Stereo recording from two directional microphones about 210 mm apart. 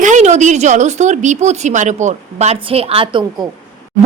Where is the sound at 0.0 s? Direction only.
35° right (ahead or behind).